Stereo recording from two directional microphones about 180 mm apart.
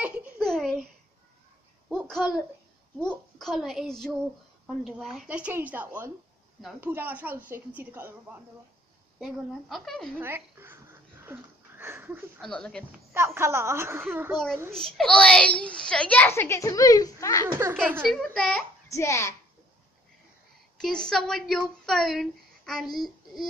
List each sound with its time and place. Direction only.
0.0 s a sound: 10° right (ahead or behind)
1.9 s a sound: centre (ahead or behind)
3.0 s a woman's voice: centre (ahead or behind)
9.2 s a woman's voice: centre (ahead or behind)
10.1 s a sound: 10° right (ahead or behind)
12.4 s a woman's voice: 5° left (ahead or behind)
12.9 s speech: 15° right (ahead or behind)
14.3 s a woman's voice: centre (ahead or behind); by 17.5 s 20° left (ahead or behind)
17.5 s speech: 15° right (ahead or behind)
18.1 s a woman's voice: centre (ahead or behind)
18.9 s a woman's voice: 15° left (ahead or behind)
20.7 s a child's voice: 5° left (ahead or behind)